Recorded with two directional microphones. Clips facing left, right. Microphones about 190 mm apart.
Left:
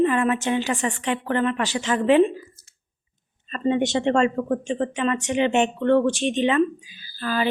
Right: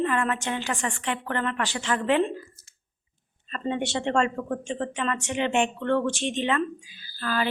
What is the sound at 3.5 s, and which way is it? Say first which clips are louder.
Speech: left 7 dB; 20° left (ahead or behind).